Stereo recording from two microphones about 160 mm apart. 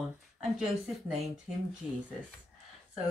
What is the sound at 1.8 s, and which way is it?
Speech, 10° right (ahead or behind).